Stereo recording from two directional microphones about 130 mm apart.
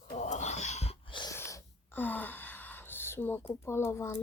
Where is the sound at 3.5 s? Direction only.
20° left (ahead or behind).